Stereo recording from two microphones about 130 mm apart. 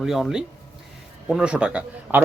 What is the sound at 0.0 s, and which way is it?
Speech, centre (ahead or behind).